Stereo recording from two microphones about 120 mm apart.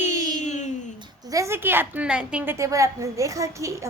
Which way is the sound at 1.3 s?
25° right (ahead or behind).